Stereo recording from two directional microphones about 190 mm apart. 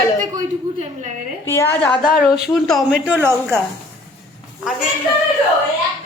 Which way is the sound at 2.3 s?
Centre (ahead or behind).